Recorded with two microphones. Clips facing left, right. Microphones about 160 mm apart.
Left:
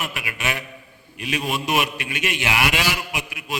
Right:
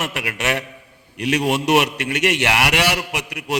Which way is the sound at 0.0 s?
75° right (ahead or behind).